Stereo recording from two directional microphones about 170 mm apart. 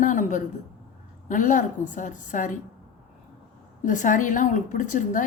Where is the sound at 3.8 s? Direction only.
50° left (ahead or behind).